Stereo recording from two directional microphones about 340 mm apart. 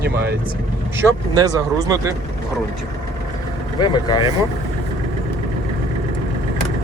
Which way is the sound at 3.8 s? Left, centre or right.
Centre.